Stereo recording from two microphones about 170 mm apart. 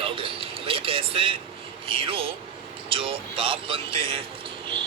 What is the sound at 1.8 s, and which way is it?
A man's voice, 35° right (ahead or behind).